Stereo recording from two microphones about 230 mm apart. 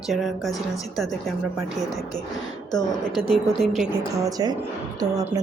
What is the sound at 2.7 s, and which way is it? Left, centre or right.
Speech, centre.